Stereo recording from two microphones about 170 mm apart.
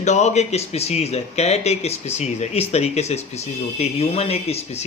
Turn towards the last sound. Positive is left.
turn(degrees=40)  # may be behind; listen again after turning